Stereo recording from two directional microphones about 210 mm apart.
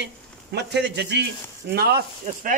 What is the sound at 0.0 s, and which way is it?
Speech, 55° right (ahead or behind).